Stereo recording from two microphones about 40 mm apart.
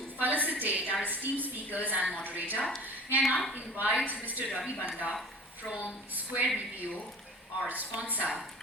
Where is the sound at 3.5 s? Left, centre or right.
Right.